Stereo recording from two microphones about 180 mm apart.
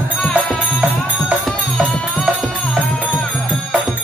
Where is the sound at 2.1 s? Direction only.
5° left (ahead or behind).